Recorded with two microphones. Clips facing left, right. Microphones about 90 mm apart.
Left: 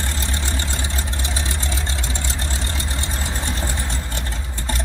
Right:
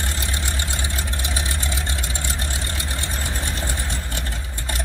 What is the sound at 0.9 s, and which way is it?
Vehicle, 20° left (ahead or behind).